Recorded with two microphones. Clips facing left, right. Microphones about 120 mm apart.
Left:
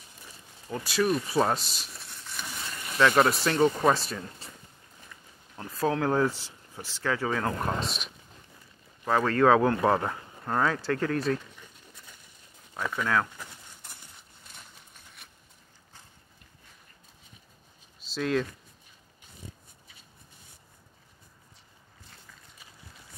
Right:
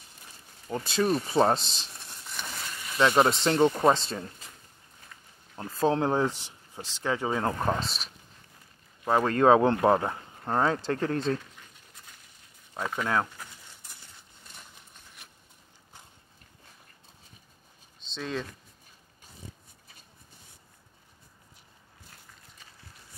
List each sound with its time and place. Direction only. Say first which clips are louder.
0.7 s speech: even; 25° right (ahead or behind)
5.6 s speech: right 2 dB; 30° right (ahead or behind)
9.0 s speech: right 1 dB; 20° right (ahead or behind)
12.9 s speech: left 1 dB; 25° right (ahead or behind)
13.8 s a sound: left 4 dB; 65° left (ahead or behind)
18.0 s a sound: left 6 dB; 5° left (ahead or behind)